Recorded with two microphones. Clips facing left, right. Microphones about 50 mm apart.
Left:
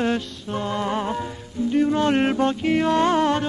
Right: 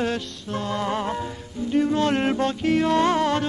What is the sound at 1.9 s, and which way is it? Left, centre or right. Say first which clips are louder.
Music: left 2 dB; left.